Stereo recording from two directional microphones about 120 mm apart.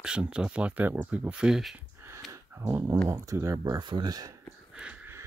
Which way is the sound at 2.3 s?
20° right (ahead or behind).